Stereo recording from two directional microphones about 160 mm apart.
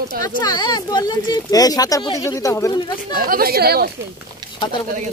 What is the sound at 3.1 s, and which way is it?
Speech, 65° right (ahead or behind).